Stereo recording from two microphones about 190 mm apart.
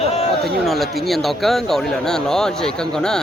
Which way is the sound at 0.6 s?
Centre (ahead or behind).